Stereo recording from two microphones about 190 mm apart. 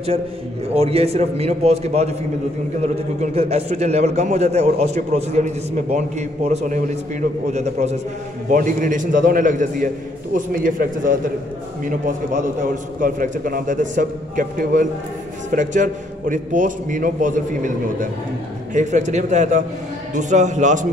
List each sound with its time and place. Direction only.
0.7 s a man's voice: 30° right (ahead or behind)
13.0 s a man's voice: 45° right (ahead or behind)